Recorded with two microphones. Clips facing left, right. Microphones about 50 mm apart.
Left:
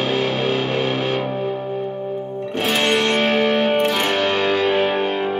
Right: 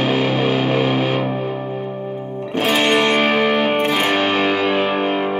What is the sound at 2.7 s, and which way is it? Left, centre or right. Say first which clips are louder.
Music: right 2 dB; right.